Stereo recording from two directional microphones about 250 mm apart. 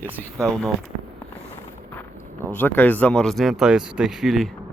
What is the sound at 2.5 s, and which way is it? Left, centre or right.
Speech, centre.